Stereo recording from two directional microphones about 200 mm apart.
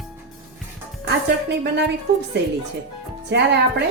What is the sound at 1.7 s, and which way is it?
Speech, 60° right (ahead or behind).